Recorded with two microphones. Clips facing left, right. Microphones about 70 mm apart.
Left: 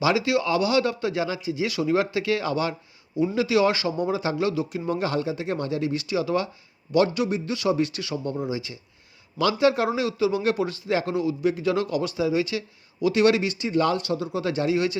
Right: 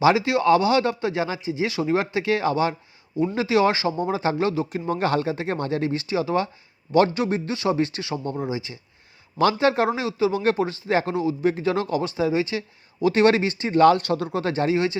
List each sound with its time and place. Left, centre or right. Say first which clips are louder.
0.0 s a man's voice: right 4 dB; right
14.4 s a man's voice: right 1 dB; right